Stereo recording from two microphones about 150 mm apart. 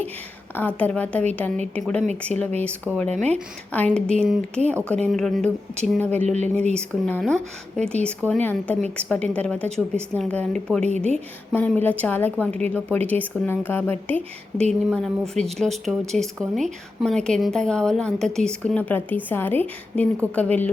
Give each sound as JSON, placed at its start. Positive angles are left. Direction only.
{"t": 0.5, "sound": "a woman's voice", "side_deg": 10}
{"t": 3.1, "sound": "speech", "side_deg": -50}
{"t": 3.7, "sound": "a woman's voice", "side_deg": 10}
{"t": 6.2, "sound": "speech", "side_deg": -50}
{"t": 6.7, "sound": "a woman's voice", "side_deg": 5}